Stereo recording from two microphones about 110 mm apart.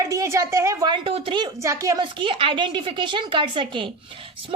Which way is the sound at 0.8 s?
50° right (ahead or behind).